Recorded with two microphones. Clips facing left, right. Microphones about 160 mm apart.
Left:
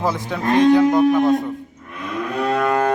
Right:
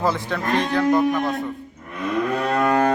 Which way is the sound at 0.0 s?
10° left (ahead or behind).